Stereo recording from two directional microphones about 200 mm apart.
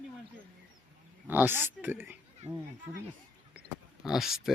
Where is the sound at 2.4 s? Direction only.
35° right (ahead or behind).